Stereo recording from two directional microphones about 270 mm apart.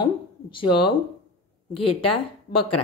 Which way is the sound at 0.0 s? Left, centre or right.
Centre.